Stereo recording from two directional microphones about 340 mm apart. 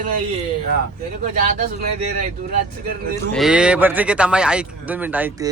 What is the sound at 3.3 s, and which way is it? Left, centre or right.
Speech, centre.